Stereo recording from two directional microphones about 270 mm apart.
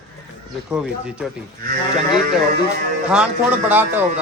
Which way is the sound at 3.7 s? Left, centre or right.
Centre.